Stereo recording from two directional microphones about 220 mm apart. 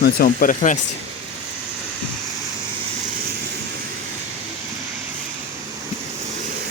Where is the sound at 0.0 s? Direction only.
40° left (ahead or behind).